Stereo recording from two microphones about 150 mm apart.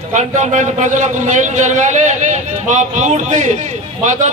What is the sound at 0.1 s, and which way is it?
A man's voice, 50° right (ahead or behind).